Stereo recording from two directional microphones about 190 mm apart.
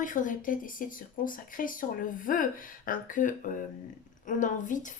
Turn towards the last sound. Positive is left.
turn(degrees=40)  # may be behind; listen again after turning